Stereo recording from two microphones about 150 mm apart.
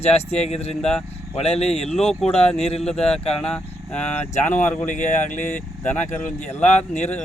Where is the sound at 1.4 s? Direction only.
45° left (ahead or behind).